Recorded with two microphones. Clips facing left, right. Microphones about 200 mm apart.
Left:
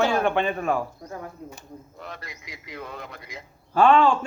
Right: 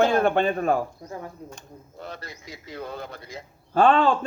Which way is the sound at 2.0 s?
30° right (ahead or behind).